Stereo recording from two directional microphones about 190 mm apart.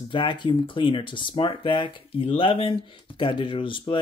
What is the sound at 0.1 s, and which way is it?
Speech, 25° left (ahead or behind).